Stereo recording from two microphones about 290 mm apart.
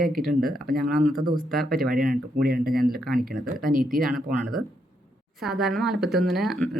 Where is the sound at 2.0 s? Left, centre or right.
Right.